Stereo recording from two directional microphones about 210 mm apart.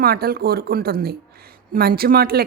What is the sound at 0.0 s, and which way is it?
Speech, 45° right (ahead or behind).